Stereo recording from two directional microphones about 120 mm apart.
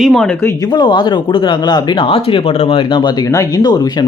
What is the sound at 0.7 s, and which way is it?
Speech, 40° left (ahead or behind).